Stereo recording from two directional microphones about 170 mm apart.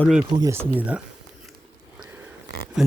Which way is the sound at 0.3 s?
25° right (ahead or behind).